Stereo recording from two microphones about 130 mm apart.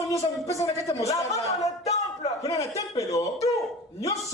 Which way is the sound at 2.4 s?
25° left (ahead or behind).